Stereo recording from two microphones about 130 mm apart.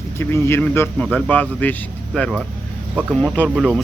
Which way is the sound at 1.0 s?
5° left (ahead or behind).